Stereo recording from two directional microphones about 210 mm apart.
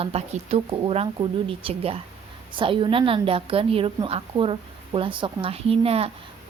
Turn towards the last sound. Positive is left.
turn(degrees=-30)  # may be behind; listen again after turning